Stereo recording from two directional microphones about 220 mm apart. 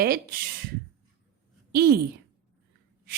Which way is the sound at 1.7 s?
45° right (ahead or behind).